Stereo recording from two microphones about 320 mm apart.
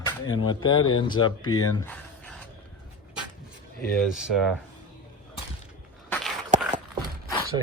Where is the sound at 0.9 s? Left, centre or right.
Centre.